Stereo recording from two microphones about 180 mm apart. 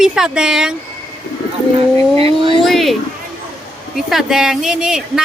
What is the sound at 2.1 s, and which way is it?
Speech, 30° right (ahead or behind).